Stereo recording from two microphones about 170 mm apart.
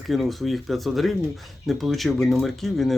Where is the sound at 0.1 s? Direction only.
Centre (ahead or behind).